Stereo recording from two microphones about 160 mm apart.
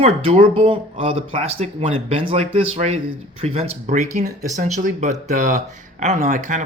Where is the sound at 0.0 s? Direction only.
40° right (ahead or behind).